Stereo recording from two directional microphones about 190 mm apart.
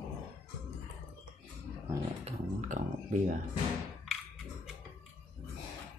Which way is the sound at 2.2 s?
35° right (ahead or behind).